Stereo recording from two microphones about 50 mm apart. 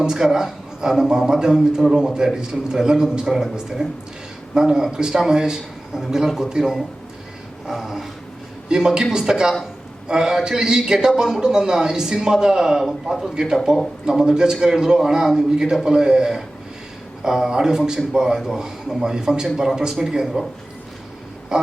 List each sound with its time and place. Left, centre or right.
0.0 s a man's voice: centre
7.7 s dog: centre
9.0 s a man's voice: centre
21.5 s a sound: centre